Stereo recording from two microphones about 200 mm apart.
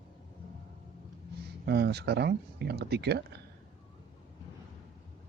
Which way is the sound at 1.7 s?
55° right (ahead or behind).